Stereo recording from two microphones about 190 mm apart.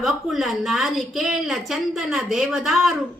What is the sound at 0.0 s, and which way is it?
A woman's voice, centre (ahead or behind).